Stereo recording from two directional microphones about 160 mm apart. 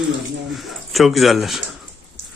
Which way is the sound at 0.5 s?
Centre (ahead or behind).